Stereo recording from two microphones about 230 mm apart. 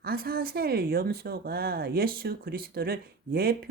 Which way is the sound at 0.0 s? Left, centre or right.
Right.